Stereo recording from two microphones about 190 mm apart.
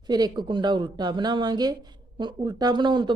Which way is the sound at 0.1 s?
20° right (ahead or behind).